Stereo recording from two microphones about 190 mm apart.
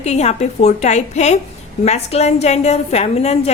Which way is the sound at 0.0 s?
35° left (ahead or behind).